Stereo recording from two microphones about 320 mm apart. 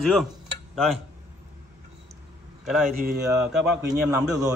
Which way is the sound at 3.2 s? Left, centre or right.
Centre.